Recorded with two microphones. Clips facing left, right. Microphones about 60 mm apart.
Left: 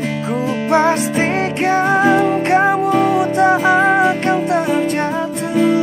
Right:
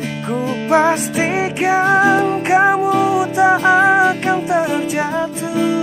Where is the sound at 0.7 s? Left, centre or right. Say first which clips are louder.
Even; centre.